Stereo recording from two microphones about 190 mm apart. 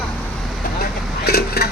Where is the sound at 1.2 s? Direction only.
55° left (ahead or behind).